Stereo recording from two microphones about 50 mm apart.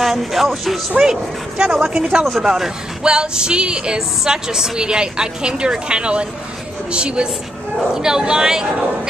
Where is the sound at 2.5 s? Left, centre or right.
Centre.